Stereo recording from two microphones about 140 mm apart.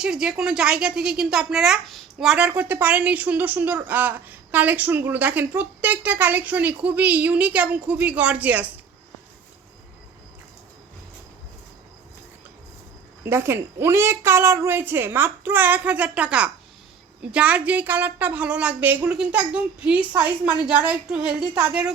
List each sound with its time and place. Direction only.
0.0 s a woman's voice: 5° right (ahead or behind)
13.2 s a woman's voice: 20° right (ahead or behind)